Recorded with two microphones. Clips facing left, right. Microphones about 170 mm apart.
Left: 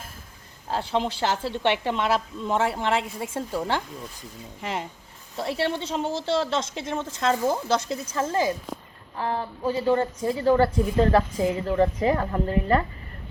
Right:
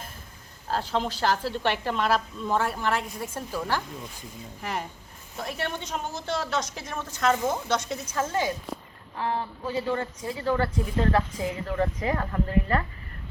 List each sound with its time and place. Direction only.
0.9 s a woman's voice: 20° left (ahead or behind)